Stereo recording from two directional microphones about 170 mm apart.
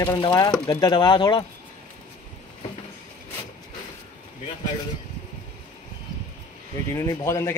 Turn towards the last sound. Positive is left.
turn(degrees=15)  # may be behind; listen again after turning